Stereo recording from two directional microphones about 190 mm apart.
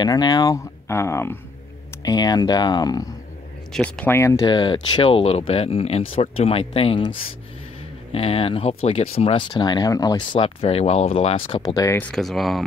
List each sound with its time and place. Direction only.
0.0 s speech: 20° left (ahead or behind)
3.7 s speech: 5° left (ahead or behind); by 7.1 s 30° left (ahead or behind)
8.1 s speech: 30° left (ahead or behind); by 12.1 s 15° left (ahead or behind)
12.1 s speech: centre (ahead or behind)